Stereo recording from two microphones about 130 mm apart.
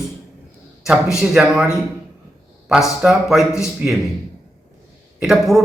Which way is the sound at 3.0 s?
5° right (ahead or behind).